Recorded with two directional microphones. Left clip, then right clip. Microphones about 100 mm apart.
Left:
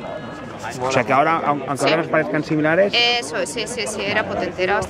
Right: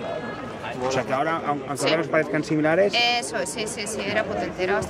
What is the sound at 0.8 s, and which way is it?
Speech, 35° left (ahead or behind).